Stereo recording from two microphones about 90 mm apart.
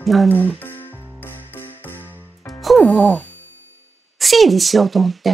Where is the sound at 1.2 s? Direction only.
25° left (ahead or behind).